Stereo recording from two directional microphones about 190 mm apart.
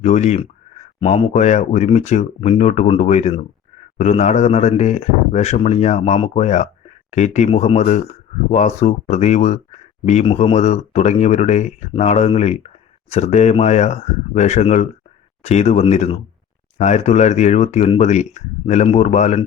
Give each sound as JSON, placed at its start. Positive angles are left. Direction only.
{"t": 0.0, "sound": "speech", "side_deg": 35}